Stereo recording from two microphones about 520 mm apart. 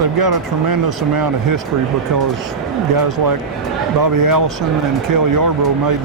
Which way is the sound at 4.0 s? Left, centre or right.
Right.